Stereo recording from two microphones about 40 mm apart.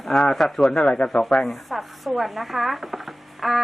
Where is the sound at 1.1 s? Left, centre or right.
Centre.